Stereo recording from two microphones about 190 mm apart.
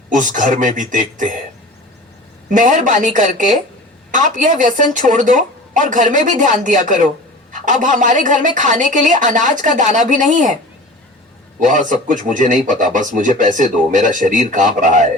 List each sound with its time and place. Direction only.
0.1 s a woman's voice: 40° right (ahead or behind)
2.5 s a woman's voice: 45° right (ahead or behind)
11.6 s a woman's voice: 40° right (ahead or behind)